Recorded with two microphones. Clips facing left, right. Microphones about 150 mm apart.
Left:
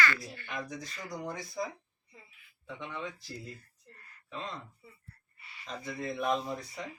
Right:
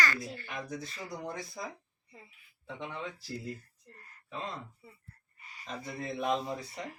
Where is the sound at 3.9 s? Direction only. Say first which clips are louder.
Right 2 dB; 40° right (ahead or behind).